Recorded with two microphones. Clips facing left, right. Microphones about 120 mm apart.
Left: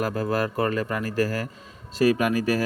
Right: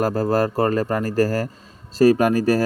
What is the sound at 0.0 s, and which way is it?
Speech, 40° right (ahead or behind).